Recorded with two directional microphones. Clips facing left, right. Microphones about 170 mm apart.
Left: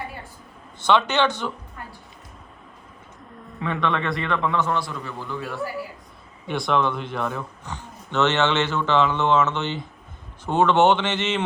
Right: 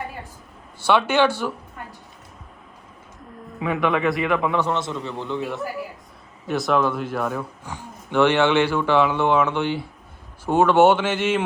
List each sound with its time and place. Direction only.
0.8 s speech: 10° right (ahead or behind)
3.6 s a man's voice: 5° right (ahead or behind)
4.5 s a man's voice: 20° right (ahead or behind)
6.5 s speech: centre (ahead or behind)